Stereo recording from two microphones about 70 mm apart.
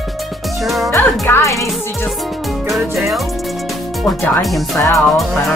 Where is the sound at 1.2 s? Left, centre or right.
Left.